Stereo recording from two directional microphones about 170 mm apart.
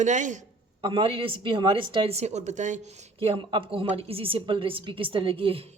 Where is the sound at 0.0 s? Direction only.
45° right (ahead or behind).